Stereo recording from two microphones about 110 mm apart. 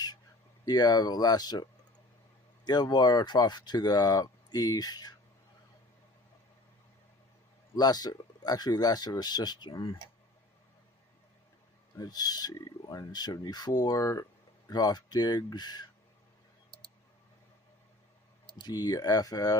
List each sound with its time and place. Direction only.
0.6 s speech: 40° left (ahead or behind)
2.6 s speech: 40° left (ahead or behind)
7.8 s speech: 35° left (ahead or behind)
11.9 s speech: 35° left (ahead or behind)
18.5 s speech: 40° left (ahead or behind)